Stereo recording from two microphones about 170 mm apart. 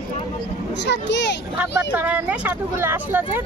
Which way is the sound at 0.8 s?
90° left.